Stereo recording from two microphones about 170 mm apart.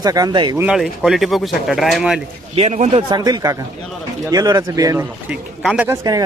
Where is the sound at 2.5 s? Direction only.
40° right (ahead or behind); by 5.0 s 20° right (ahead or behind).